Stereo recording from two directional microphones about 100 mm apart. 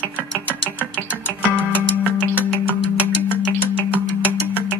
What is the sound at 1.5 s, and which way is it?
Music, 20° left (ahead or behind).